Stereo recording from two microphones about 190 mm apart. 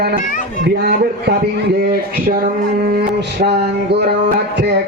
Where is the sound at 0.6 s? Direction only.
55° right (ahead or behind).